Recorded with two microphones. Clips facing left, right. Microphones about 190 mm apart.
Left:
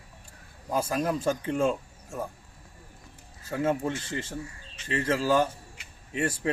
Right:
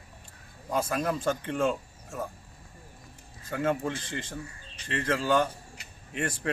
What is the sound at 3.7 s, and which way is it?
Speech, 5° left (ahead or behind).